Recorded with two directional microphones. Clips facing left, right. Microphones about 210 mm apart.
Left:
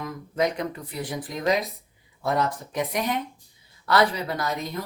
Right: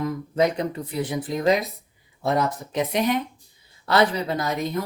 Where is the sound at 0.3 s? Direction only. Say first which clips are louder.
Right 3 dB; 30° right (ahead or behind).